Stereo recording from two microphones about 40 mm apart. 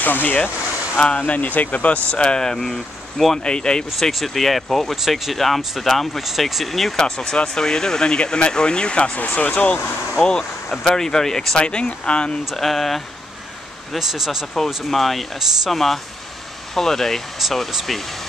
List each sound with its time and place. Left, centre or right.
0.0 s speech: left
0.9 s speech: left
1.2 s speech: left
2.4 s speech: centre
3.4 s speech: centre
4.0 s speech: centre
7.0 s speech: centre
9.2 s speech: left
10.8 s speech: centre
11.5 s speech: left
12.5 s speech: centre
13.9 s speech: centre
14.9 s speech: centre
17.4 s speech: centre